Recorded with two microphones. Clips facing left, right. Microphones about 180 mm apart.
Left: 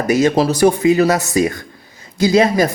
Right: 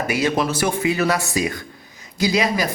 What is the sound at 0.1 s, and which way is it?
A man's voice, 40° left (ahead or behind).